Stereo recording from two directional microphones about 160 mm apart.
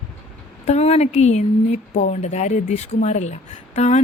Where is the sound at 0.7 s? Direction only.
40° left (ahead or behind).